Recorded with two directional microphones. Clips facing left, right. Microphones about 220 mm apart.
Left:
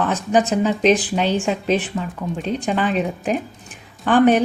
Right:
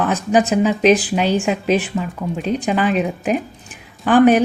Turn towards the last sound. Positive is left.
turn(degrees=-5)  # may be behind; listen again after turning